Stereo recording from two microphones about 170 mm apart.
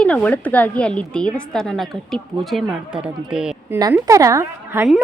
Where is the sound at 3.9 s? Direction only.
20° right (ahead or behind).